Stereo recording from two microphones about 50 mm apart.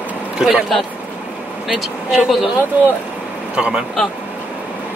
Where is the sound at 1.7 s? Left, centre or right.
Centre.